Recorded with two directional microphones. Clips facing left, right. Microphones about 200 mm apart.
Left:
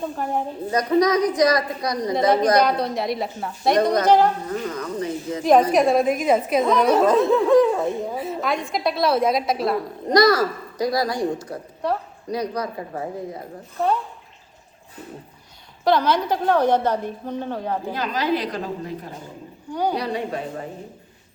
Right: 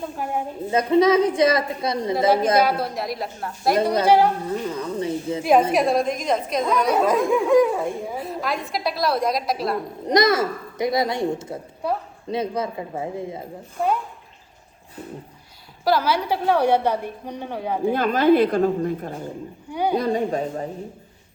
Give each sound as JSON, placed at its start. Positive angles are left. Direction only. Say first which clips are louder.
{"t": 0.7, "sound": "a child's voice", "louder": "right 2 dB", "side_deg": -25}
{"t": 2.1, "sound": "a woman's voice", "louder": "left 1 dB", "side_deg": -5}
{"t": 4.4, "sound": "a child's voice", "louder": "right 1 dB", "side_deg": -30}
{"t": 5.4, "sound": "a woman's voice", "louder": "left 2 dB", "side_deg": -10}
{"t": 6.7, "sound": "a woman's voice", "louder": "left 2 dB", "side_deg": -10}
{"t": 8.1, "sound": "a woman's voice", "louder": "left 2 dB", "side_deg": 0}
{"t": 10.1, "sound": "a child's voice", "louder": "left 2 dB", "side_deg": -20}
{"t": 13.7, "sound": "a woman's voice", "louder": "left 1 dB", "side_deg": -10}
{"t": 15.8, "sound": "a woman's voice", "louder": "left 2 dB", "side_deg": -5}
{"t": 17.9, "sound": "a woman's voice", "louder": "right 9 dB", "side_deg": -55}
{"t": 19.7, "sound": "a woman's voice", "louder": "right 1 dB", "side_deg": -10}
{"t": 20.0, "sound": "a woman's voice", "louder": "right 4 dB", "side_deg": -45}